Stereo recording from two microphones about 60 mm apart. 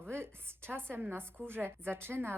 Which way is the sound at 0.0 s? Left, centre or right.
Right.